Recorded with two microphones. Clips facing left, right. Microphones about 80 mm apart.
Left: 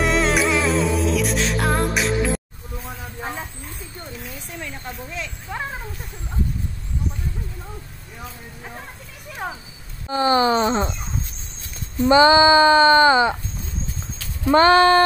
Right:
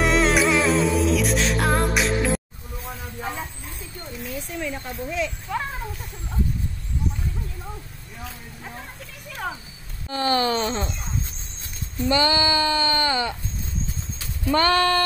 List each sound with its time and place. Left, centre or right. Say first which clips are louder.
0.0 s music: even; centre
2.8 s vehicle: even; left
4.3 s speech: right 4 dB; centre
10.0 s speech: left 4 dB; centre
12.0 s speech: left 8 dB; left
14.4 s speech: left 6 dB; left